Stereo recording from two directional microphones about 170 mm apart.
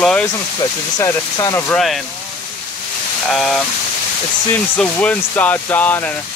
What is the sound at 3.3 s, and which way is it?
Speech, centre (ahead or behind).